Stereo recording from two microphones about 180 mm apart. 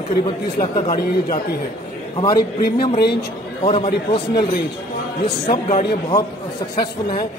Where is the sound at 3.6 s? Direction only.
35° left (ahead or behind).